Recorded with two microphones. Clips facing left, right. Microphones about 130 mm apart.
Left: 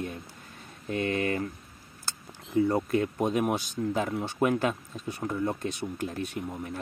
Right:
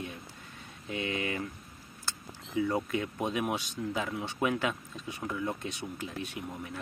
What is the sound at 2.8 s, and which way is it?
Speech, 45° left (ahead or behind).